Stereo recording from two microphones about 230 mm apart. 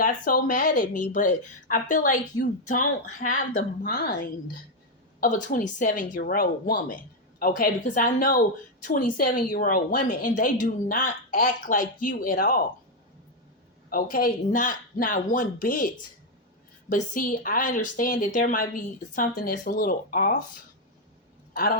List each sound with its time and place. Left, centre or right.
0.0 s a woman's voice: left
13.9 s a woman's voice: left